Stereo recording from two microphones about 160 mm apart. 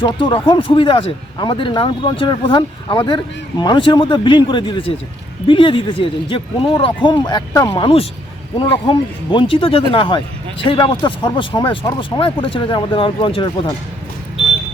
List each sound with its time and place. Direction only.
0.0 s speech: 30° left (ahead or behind)
8.5 s speech: 35° left (ahead or behind)